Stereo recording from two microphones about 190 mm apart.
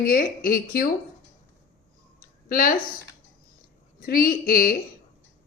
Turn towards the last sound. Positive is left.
turn(degrees=50)  # may be behind; listen again after turning